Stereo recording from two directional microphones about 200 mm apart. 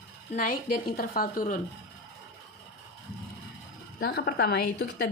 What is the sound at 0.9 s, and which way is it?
Speech, 45° left (ahead or behind).